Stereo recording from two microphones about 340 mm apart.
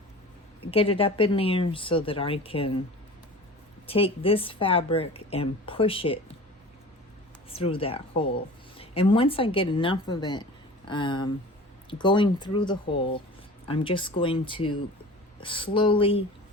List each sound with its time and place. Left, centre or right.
0.7 s a woman's voice: centre
3.8 s a woman's voice: centre
7.5 s a woman's voice: centre